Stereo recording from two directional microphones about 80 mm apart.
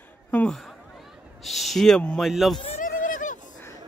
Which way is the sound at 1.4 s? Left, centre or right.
Centre.